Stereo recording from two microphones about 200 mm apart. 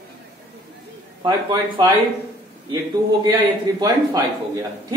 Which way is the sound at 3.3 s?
20° right (ahead or behind).